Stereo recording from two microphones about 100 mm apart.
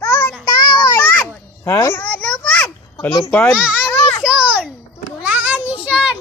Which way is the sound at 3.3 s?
20° left (ahead or behind).